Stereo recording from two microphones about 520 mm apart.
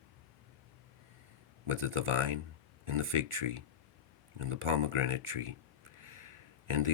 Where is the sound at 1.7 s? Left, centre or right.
Right.